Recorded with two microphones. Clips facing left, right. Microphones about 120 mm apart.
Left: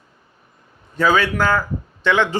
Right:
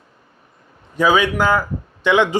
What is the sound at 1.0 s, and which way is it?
Speech, 15° right (ahead or behind).